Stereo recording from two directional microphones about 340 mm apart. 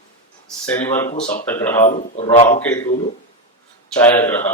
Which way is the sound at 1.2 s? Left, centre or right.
Left.